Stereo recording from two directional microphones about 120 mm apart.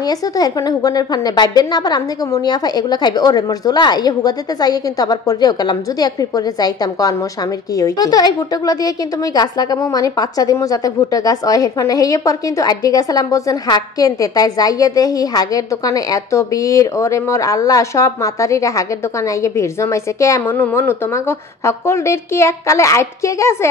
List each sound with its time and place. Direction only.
0.0 s a woman's voice: 30° left (ahead or behind)